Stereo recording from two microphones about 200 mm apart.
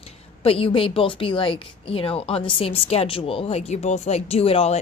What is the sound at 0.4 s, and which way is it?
A woman's voice, 30° left (ahead or behind).